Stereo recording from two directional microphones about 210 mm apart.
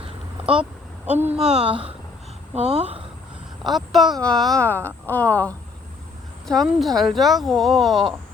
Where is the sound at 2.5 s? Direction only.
30° right (ahead or behind).